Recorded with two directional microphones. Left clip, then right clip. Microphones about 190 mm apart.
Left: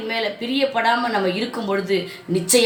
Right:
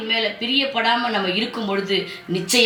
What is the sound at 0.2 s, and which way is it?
A woman's voice, 20° left (ahead or behind).